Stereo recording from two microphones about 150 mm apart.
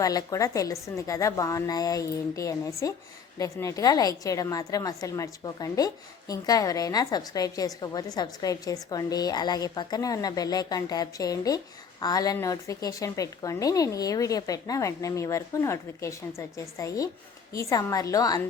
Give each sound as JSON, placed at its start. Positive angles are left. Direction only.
{"t": 0.0, "sound": "a woman's voice", "side_deg": 25}